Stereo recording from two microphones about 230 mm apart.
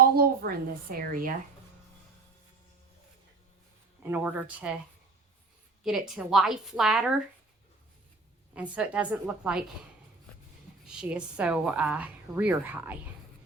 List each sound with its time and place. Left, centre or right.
0.0 s a woman's voice: right
4.1 s speech: centre
5.8 s a woman's voice: centre
8.5 s a woman's voice: centre
10.8 s a woman's voice: centre